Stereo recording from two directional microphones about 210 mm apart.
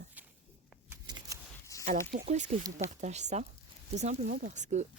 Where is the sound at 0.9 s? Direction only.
20° right (ahead or behind).